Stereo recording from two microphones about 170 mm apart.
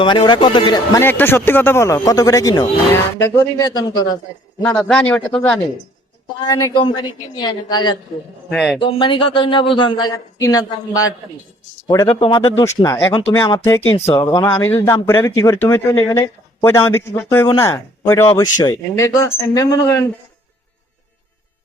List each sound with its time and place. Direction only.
0.0 s a man's voice: 25° left (ahead or behind)
0.9 s a man's voice: 10° left (ahead or behind)
4.6 s speech: 10° left (ahead or behind)
6.5 s a man's voice: 20° left (ahead or behind)
8.4 s speech: centre (ahead or behind)
8.8 s a man's voice: 30° left (ahead or behind)
12.0 s speech: 35° left (ahead or behind)
12.5 s a man's voice: 15° left (ahead or behind)
13.9 s speech: 35° left (ahead or behind)
14.2 s a man's voice: 20° left (ahead or behind)